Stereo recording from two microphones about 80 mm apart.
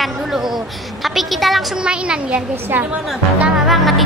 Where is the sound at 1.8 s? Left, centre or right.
Centre.